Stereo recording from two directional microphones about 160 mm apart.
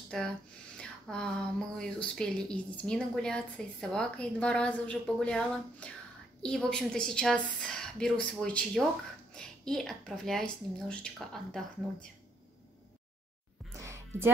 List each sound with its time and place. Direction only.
0.1 s speech: centre (ahead or behind)
13.7 s music: 15° right (ahead or behind)